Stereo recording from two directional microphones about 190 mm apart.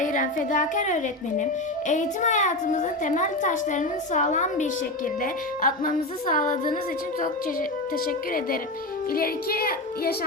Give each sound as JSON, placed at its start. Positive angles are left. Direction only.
{"t": 0.0, "sound": "a woman's voice", "side_deg": 40}
{"t": 9.1, "sound": "speech", "side_deg": 50}